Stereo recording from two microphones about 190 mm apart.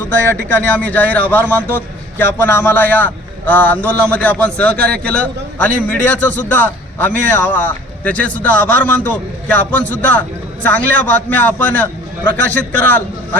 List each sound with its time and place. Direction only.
0.4 s a man's voice: 10° left (ahead or behind)